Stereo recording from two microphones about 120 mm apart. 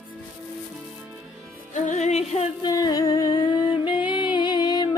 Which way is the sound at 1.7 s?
80° left.